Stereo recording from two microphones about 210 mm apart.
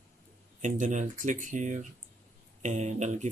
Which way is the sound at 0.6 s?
35° right (ahead or behind).